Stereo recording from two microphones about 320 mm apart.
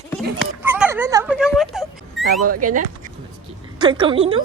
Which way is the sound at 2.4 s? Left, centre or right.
Right.